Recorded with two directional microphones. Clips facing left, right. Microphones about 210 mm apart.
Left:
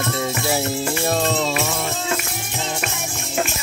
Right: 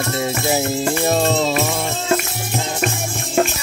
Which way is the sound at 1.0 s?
30° right (ahead or behind).